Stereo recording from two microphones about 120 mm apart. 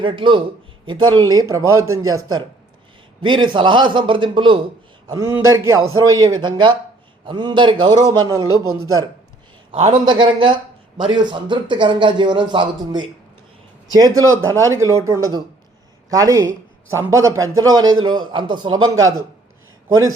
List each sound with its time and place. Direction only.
0.0 s a man's voice: 45° right (ahead or behind); by 2.4 s 30° right (ahead or behind)
3.2 s a man's voice: 40° right (ahead or behind)
5.0 s speech: 30° right (ahead or behind)
8.0 s speech: 30° right (ahead or behind)
10.1 s speech: 40° right (ahead or behind)